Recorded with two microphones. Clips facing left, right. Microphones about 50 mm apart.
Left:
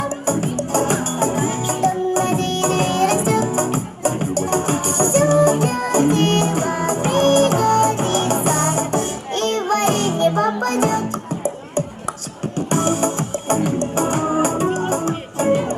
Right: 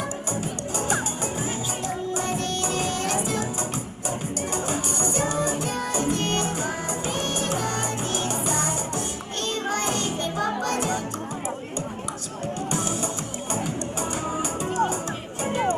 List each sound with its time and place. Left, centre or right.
0.0 s music: left
12.7 s music: left